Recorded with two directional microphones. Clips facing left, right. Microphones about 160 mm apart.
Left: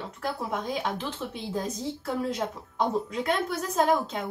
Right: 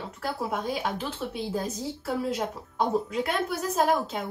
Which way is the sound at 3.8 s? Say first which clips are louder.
Left 1 dB; 5° right (ahead or behind).